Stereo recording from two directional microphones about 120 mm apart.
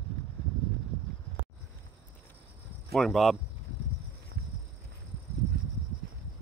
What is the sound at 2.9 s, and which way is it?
Speech, centre (ahead or behind).